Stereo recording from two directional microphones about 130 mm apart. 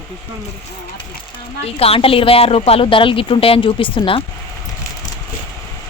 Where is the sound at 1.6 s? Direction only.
50° left (ahead or behind).